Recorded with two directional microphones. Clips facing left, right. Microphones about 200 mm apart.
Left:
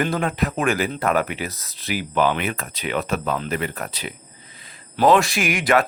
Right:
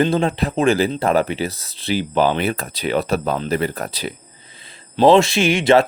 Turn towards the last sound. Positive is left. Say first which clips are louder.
# right 5 dB
turn(degrees=-25)  # may be behind; listen again after turning